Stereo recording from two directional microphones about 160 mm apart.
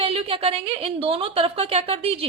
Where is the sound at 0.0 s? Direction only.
35° right (ahead or behind).